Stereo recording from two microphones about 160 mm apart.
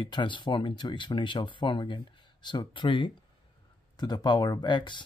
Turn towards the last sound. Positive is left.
turn(degrees=30)  # may be behind; listen again after turning